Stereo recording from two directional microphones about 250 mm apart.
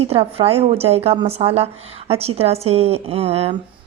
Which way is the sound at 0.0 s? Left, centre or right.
Right.